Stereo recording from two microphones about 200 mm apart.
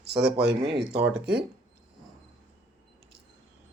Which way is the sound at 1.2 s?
55° right (ahead or behind).